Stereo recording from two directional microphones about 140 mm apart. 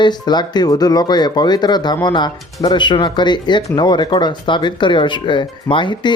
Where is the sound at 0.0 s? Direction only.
30° left (ahead or behind).